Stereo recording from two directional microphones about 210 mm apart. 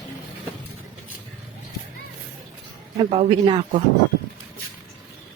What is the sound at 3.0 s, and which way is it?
Speech, 25° right (ahead or behind).